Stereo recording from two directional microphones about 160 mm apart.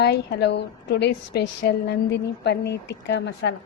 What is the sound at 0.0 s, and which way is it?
A woman's voice, 90° left.